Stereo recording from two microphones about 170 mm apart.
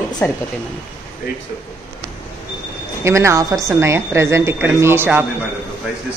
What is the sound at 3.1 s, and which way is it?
A woman's voice, 15° right (ahead or behind).